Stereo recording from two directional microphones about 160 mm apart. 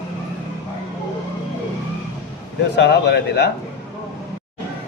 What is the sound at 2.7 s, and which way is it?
Speech, 90° left.